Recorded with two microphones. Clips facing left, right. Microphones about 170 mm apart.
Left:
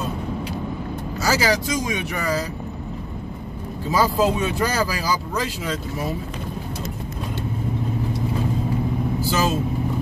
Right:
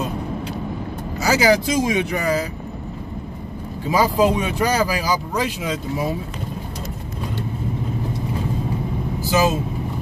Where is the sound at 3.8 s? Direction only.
15° right (ahead or behind).